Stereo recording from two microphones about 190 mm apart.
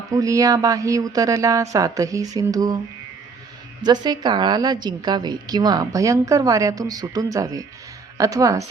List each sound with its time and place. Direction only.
0.1 s speech: 15° right (ahead or behind)
3.8 s a woman's voice: 20° right (ahead or behind)